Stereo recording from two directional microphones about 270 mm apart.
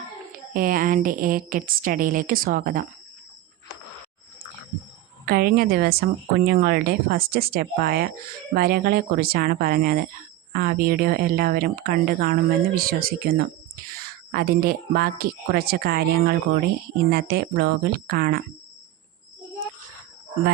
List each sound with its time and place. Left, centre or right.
0.5 s speech: right
5.2 s speech: right